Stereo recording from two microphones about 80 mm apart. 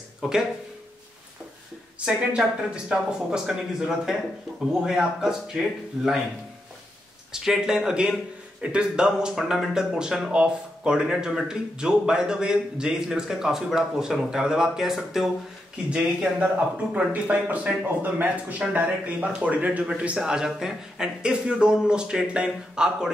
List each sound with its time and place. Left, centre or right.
0.2 s speech: centre
2.0 s speech: centre
7.3 s speech: centre
15.9 s speech: centre